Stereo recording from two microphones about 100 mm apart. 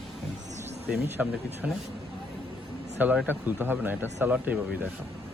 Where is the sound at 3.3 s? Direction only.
20° right (ahead or behind).